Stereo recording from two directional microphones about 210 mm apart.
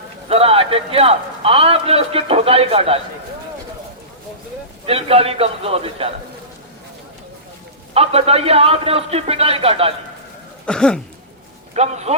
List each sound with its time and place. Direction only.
0.3 s a man's voice: 25° right (ahead or behind)
4.9 s a man's voice: 25° right (ahead or behind)
7.9 s a man's voice: 30° right (ahead or behind)
10.7 s a sound: 5° left (ahead or behind)
11.7 s a man's voice: 30° right (ahead or behind)